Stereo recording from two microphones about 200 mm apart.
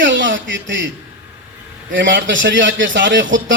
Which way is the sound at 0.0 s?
65° right (ahead or behind).